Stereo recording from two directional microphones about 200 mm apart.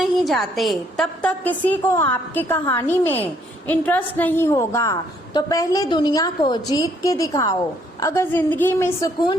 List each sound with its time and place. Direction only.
0.0 s a woman's voice: centre (ahead or behind)